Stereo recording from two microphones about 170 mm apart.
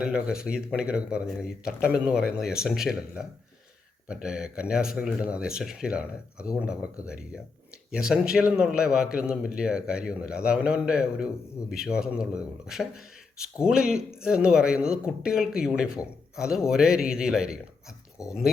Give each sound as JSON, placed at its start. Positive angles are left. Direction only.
{"t": 0.0, "sound": "speech", "side_deg": -5}
{"t": 18.2, "sound": "speech", "side_deg": 20}